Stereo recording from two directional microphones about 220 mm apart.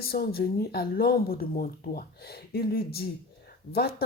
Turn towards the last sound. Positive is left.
turn(degrees=45)  # may be behind; listen again after turning